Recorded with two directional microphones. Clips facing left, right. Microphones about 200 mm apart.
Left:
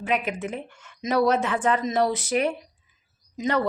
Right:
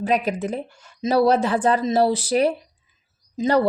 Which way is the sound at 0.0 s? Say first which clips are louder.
Right 5 dB; 35° right (ahead or behind).